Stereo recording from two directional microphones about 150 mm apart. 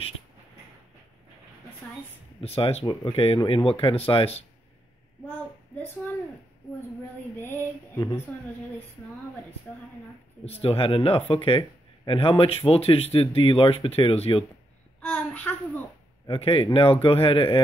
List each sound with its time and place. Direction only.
2.4 s speech: 40° left (ahead or behind)
2.9 s female singing: 15° left (ahead or behind)
3.2 s speech: 40° left (ahead or behind)
7.3 s female singing: 15° left (ahead or behind)
10.4 s speech: 40° left (ahead or behind)
15.0 s a sound: 10° left (ahead or behind)
16.3 s speech: 35° left (ahead or behind)